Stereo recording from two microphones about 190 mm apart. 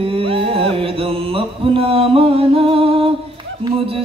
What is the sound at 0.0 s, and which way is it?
Music, 30° right (ahead or behind).